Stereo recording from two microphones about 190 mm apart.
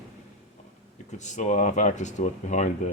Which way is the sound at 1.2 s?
40° left (ahead or behind).